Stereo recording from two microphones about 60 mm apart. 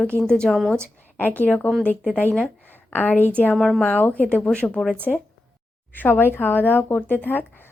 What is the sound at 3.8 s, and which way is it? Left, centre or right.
Speech, left.